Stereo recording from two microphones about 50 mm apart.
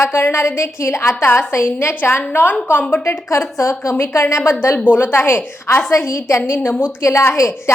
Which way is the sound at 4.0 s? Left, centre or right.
Left.